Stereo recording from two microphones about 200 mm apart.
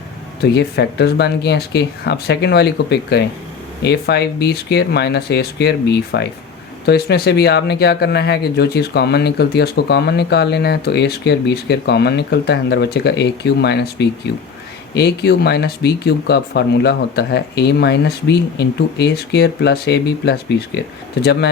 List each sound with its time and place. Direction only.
0.4 s speech: 55° left (ahead or behind)